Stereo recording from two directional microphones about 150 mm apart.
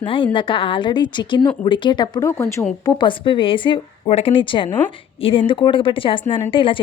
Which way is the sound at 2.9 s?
35° left (ahead or behind).